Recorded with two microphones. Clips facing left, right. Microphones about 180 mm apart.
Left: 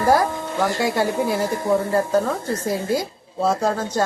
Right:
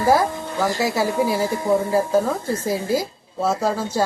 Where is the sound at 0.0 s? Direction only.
Centre (ahead or behind).